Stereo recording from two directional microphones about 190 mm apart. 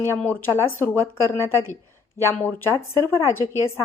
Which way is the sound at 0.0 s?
10° left (ahead or behind).